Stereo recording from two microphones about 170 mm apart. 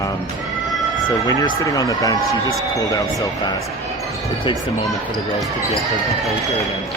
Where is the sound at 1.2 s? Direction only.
20° left (ahead or behind).